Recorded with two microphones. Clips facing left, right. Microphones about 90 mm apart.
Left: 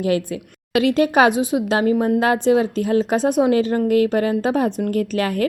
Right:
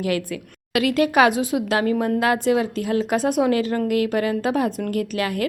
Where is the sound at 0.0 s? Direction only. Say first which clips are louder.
Left 4 dB; 25° left (ahead or behind).